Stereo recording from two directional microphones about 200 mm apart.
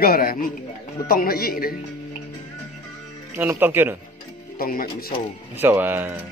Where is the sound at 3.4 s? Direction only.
10° right (ahead or behind).